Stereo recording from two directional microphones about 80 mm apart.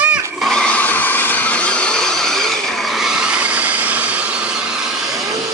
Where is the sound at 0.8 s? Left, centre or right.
Left; by 4.2 s centre.